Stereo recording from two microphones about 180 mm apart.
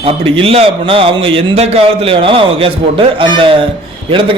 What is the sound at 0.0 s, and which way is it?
A man's voice, 30° right (ahead or behind).